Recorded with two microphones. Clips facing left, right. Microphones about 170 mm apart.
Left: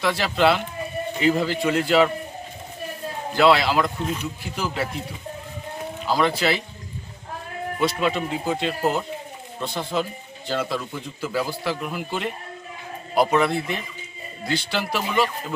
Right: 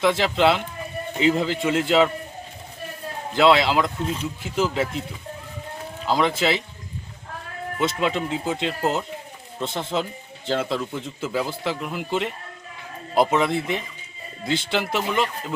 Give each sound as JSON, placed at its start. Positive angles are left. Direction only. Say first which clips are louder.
{"t": 0.0, "sound": "speech", "louder": "right 1 dB", "side_deg": -20}
{"t": 3.3, "sound": "speech", "louder": "even", "side_deg": -20}
{"t": 6.1, "sound": "speech", "louder": "even", "side_deg": -20}
{"t": 7.8, "sound": "speech", "louder": "even", "side_deg": -20}